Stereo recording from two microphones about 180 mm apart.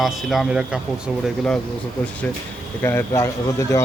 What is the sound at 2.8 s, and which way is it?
Speech, 15° left (ahead or behind).